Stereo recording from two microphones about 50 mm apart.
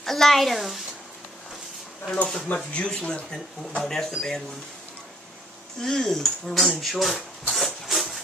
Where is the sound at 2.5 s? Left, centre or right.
Left.